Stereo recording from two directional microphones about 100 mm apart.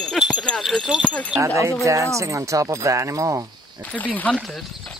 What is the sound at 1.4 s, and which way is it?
Speech, 30° right (ahead or behind).